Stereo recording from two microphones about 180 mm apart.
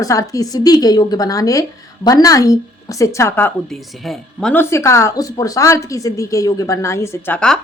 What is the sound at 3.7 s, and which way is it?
Speech, centre (ahead or behind).